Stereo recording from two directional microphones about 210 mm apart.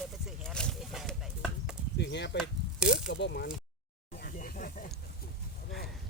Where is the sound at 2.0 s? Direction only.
55° left (ahead or behind).